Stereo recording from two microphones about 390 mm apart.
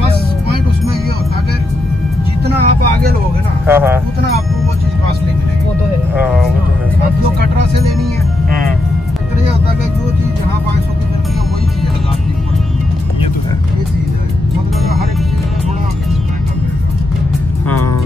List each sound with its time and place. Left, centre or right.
2.4 s vehicle: right
3.6 s speech: centre